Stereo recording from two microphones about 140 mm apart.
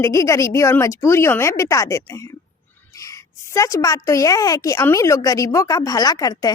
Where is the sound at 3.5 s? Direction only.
25° left (ahead or behind).